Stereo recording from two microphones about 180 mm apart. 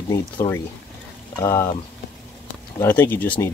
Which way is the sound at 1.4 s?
15° left (ahead or behind).